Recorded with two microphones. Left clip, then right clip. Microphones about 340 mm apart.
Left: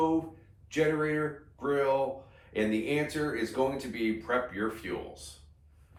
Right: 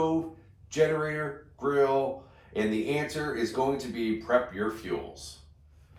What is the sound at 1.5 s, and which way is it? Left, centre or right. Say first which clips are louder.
Speech: right 3 dB; centre.